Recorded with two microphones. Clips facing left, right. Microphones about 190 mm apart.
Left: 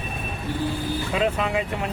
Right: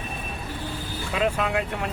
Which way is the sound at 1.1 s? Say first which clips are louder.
Even; centre (ahead or behind).